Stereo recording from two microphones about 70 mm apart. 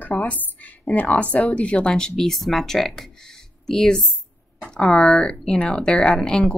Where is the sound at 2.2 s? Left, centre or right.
Centre.